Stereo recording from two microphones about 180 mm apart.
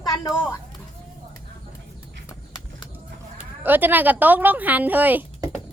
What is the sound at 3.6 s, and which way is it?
A woman's voice, 10° right (ahead or behind).